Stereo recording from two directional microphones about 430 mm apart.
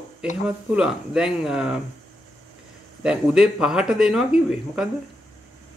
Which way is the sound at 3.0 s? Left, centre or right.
Centre.